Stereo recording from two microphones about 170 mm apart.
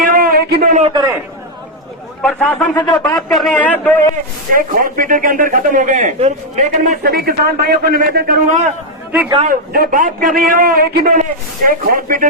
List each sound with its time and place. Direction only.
0.1 s a sound: 60° right (ahead or behind)
0.9 s a man's voice: 15° right (ahead or behind)
2.2 s a man's voice: 5° left (ahead or behind)
2.7 s speech: 25° left (ahead or behind)
3.1 s a man's voice: centre (ahead or behind)
4.5 s speech: 55° right (ahead or behind)
7.0 s a man's voice: 65° right (ahead or behind); by 8.7 s 45° right (ahead or behind)
9.4 s a man's voice: 60° right (ahead or behind)